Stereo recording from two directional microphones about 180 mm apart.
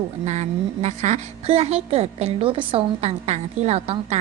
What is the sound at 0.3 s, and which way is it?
A woman's voice, 40° right (ahead or behind).